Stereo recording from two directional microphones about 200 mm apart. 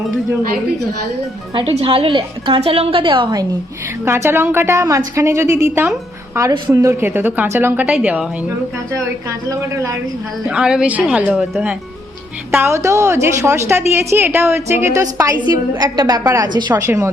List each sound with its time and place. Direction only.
1.5 s a woman's voice: 30° right (ahead or behind)
4.0 s a woman's voice: 10° right (ahead or behind)
9.5 s a woman's voice: 15° right (ahead or behind)
10.5 s a woman's voice: 5° right (ahead or behind)